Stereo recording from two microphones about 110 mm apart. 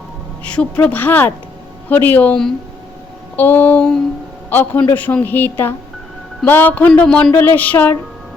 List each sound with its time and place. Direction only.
0.4 s a man's voice: 10° left (ahead or behind)